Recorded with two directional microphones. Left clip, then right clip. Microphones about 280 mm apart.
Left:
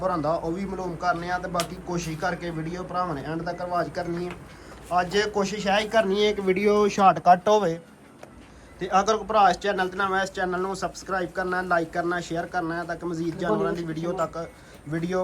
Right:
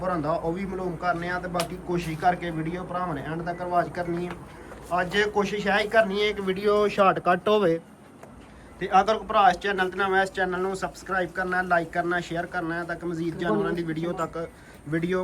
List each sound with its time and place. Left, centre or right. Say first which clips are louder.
0.0 s a man's voice: left 1 dB; centre
8.8 s a man's voice: right 1 dB; centre